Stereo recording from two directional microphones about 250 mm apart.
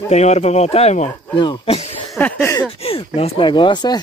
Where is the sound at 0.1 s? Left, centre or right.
Left.